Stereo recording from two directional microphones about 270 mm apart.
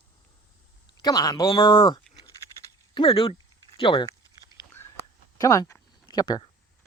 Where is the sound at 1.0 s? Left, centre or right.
Centre.